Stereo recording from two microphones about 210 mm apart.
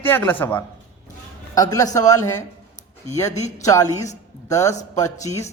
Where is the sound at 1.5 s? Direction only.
15° left (ahead or behind).